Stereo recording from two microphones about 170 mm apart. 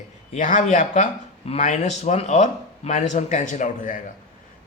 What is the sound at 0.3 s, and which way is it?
Speech, 50° left (ahead or behind).